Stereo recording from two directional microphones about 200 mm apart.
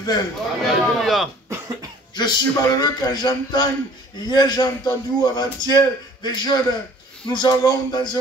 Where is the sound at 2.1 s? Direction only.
20° left (ahead or behind).